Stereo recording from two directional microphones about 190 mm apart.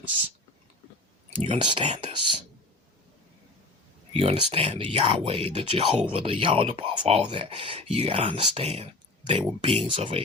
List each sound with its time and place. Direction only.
1.4 s speech: 30° right (ahead or behind)
4.1 s speech: 30° right (ahead or behind)